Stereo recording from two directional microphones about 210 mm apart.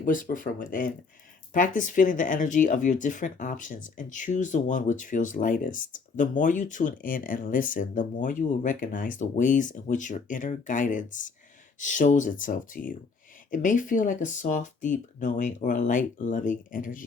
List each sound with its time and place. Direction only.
0.0 s speech: 40° left (ahead or behind)